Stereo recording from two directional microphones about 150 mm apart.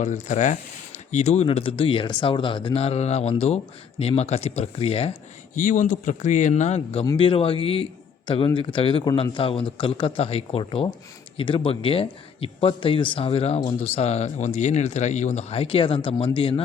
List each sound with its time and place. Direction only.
0.0 s speech: 55° left (ahead or behind)
5.5 s speech: 60° left (ahead or behind)
7.2 s speech: 35° left (ahead or behind)